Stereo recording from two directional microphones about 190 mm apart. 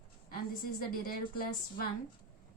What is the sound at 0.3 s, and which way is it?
A woman's voice, 50° left (ahead or behind).